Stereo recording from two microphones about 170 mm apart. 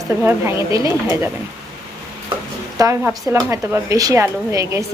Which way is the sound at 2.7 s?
20° right (ahead or behind).